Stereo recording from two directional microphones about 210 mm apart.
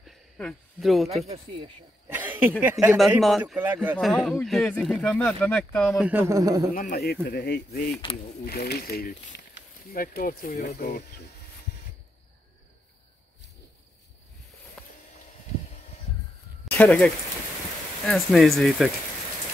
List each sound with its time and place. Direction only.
0.0 s a sound: centre (ahead or behind)
1.2 s speech: 30° right (ahead or behind)
2.1 s speech: 10° right (ahead or behind)
6.7 s speech: 40° left (ahead or behind)
8.0 s speech: 25° left (ahead or behind)
8.5 s speech: 45° left (ahead or behind)
14.8 s vehicle: 5° left (ahead or behind)
16.7 s speech: 10° left (ahead or behind)